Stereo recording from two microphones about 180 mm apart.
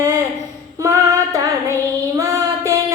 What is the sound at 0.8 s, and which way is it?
Child singing, 15° right (ahead or behind).